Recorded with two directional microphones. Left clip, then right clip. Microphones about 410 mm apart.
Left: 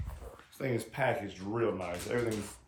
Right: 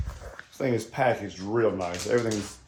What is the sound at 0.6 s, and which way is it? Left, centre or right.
Speech, centre.